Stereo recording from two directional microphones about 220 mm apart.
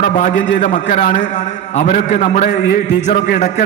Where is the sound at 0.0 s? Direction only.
35° left (ahead or behind).